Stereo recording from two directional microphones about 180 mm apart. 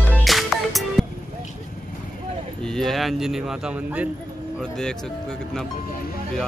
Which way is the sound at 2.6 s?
5° left (ahead or behind).